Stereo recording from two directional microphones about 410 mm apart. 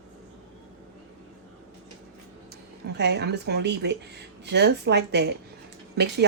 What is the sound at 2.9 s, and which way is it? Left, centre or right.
Speech, right.